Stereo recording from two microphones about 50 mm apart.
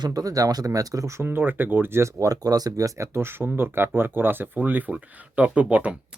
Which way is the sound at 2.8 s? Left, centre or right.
Right.